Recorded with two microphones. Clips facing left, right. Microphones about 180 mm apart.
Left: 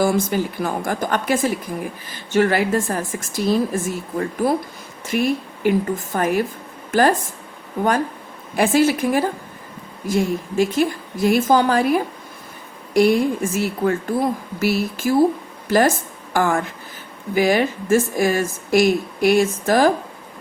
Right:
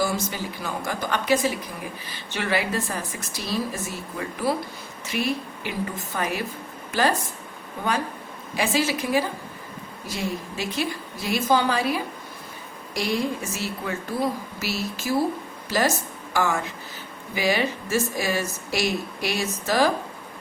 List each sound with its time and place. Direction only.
0.0 s a woman's voice: 55° left (ahead or behind)
8.5 s a woman's voice: 50° left (ahead or behind)